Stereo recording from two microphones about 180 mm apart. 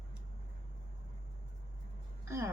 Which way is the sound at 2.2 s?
15° right (ahead or behind).